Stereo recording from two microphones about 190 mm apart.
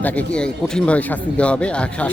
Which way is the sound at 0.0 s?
10° left (ahead or behind).